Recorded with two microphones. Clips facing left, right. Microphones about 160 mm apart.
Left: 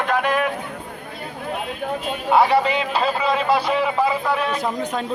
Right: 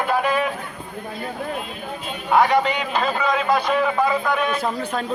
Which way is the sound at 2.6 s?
30° left (ahead or behind).